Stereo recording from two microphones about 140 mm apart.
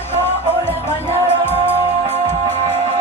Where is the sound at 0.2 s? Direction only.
15° left (ahead or behind).